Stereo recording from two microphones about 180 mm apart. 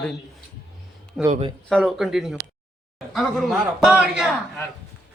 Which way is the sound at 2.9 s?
Centre (ahead or behind).